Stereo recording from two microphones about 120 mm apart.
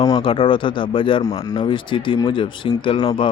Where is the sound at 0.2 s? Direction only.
50° left (ahead or behind).